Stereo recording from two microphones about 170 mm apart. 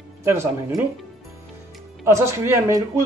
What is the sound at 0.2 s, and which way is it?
Speech, 15° right (ahead or behind).